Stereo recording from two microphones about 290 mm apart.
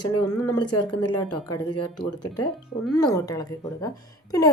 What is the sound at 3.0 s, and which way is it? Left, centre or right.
Speech, centre.